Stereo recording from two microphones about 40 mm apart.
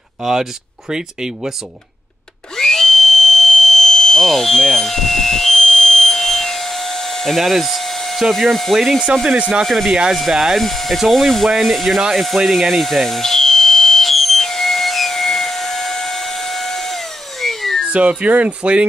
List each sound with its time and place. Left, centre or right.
0.2 s speech: centre
2.5 s a sound: centre
8.3 s speech: centre
10.6 s speech: centre
12.4 s alarm: centre
17.8 s speech: right